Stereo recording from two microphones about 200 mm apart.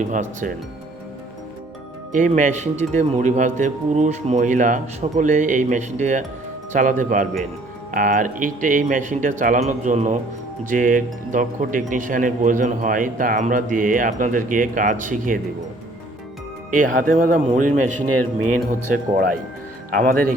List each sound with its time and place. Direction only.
0.0 s speech: 40° right (ahead or behind)
2.1 s speech: 40° right (ahead or behind)
16.7 s speech: 40° right (ahead or behind)
18.7 s speech: 45° right (ahead or behind)